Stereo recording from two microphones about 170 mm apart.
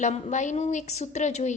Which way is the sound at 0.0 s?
45° left (ahead or behind).